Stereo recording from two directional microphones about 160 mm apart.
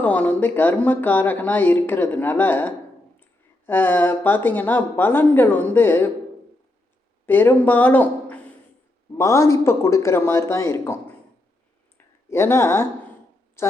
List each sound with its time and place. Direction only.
0.0 s speech: 10° left (ahead or behind)
7.3 s speech: 10° left (ahead or behind)
9.1 s speech: 20° left (ahead or behind)
11.9 s a sound: 15° left (ahead or behind)